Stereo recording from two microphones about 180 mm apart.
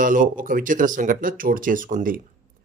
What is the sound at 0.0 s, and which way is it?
Speech, 50° right (ahead or behind).